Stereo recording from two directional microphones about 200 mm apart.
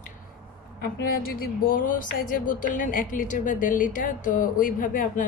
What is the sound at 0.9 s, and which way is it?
Music, 50° left (ahead or behind).